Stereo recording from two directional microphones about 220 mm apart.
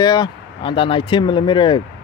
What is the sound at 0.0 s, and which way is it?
Speech, 20° left (ahead or behind).